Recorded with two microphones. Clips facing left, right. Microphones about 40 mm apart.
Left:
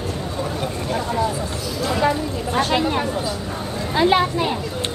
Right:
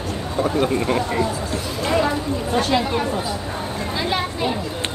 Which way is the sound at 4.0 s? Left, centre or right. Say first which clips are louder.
Left 8 dB; left.